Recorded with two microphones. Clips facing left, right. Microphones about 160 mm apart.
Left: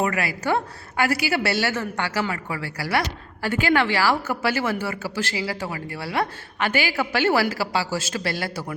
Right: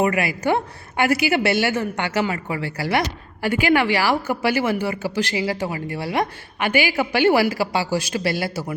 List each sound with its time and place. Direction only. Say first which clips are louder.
0.0 s a woman's voice: right 4 dB; 15° right (ahead or behind)